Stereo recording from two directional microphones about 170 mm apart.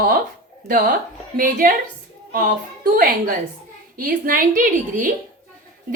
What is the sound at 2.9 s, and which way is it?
A woman's voice, 55° right (ahead or behind).